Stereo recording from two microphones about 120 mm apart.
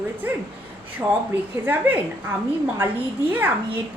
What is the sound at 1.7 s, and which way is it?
Speech, 15° right (ahead or behind).